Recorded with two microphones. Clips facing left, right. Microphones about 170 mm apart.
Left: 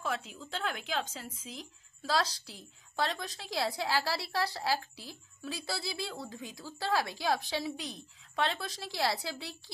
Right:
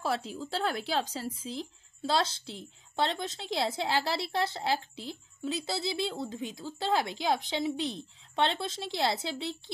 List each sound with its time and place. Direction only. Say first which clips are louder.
0.0 s speech: right 5 dB; 35° right (ahead or behind)